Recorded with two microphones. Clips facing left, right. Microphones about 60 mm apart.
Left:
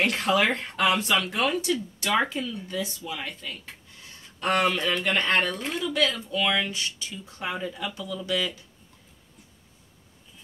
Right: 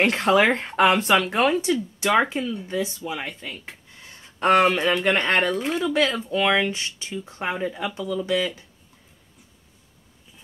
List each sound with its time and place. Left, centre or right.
0.0 s speech: right
5.4 s speech: centre
5.9 s speech: right